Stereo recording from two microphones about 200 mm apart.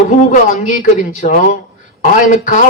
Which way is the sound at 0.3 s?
40° left (ahead or behind).